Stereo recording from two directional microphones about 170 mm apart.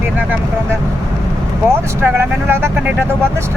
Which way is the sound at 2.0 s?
15° right (ahead or behind).